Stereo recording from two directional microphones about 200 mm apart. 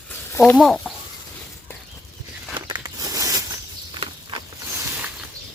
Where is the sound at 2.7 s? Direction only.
20° right (ahead or behind).